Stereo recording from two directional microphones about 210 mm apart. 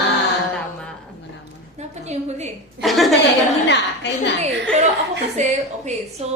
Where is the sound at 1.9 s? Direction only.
30° right (ahead or behind).